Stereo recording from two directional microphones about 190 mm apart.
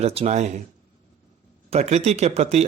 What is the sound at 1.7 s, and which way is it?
Speech, 35° right (ahead or behind).